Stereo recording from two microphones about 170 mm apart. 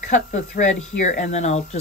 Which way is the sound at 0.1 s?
45° left (ahead or behind).